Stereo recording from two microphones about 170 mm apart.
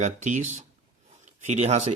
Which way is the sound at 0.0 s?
45° right (ahead or behind).